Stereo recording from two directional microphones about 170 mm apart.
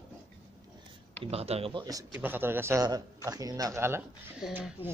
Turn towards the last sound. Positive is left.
turn(degrees=-5)  # may be behind; listen again after turning